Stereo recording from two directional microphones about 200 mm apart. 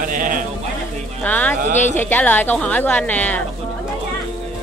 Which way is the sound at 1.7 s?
35° left (ahead or behind).